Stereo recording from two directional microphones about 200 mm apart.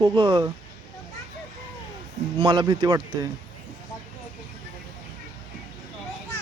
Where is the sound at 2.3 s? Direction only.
25° right (ahead or behind).